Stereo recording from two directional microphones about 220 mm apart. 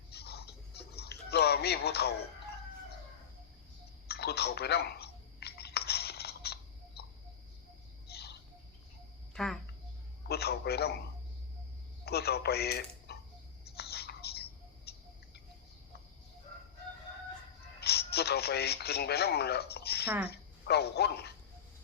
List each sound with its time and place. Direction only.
0.1 s a sound: 45° left (ahead or behind)
4.1 s a sound: 45° left (ahead or behind)
8.1 s bird: 45° left (ahead or behind)
9.3 s a woman's voice: centre (ahead or behind)
10.2 s a man's voice: 45° left (ahead or behind)
12.0 s speech: 45° left (ahead or behind)
13.7 s whispering: 45° left (ahead or behind)
14.9 s bird: 45° left (ahead or behind)
17.7 s speech: 45° left (ahead or behind)
20.1 s speech: 5° right (ahead or behind)
20.3 s speech: 45° left (ahead or behind)